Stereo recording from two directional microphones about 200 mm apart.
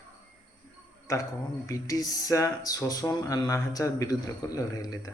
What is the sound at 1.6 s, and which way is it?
Speech, 15° left (ahead or behind).